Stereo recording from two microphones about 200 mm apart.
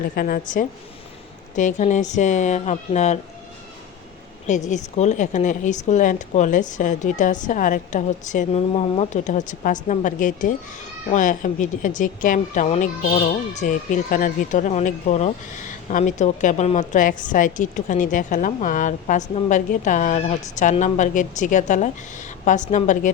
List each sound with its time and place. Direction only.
0.2 s a woman's voice: 45° left (ahead or behind)
4.4 s a woman's voice: 35° left (ahead or behind)